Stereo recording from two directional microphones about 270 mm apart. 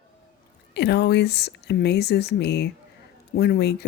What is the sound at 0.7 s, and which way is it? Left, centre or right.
Speech, left.